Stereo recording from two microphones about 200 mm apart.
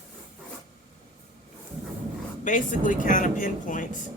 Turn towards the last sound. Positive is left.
turn(degrees=40)  # may be behind; listen again after turning